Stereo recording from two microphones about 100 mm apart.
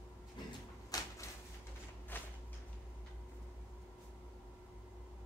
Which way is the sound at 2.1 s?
20° left (ahead or behind).